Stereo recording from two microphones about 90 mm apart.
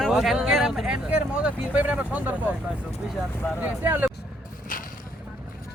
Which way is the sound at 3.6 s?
20° right (ahead or behind).